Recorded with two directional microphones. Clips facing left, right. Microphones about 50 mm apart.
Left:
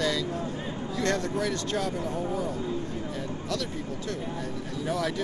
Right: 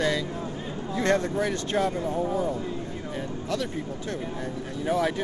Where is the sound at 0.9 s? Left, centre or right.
Right.